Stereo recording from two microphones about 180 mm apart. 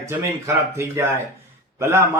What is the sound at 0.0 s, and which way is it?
Speech, 15° right (ahead or behind).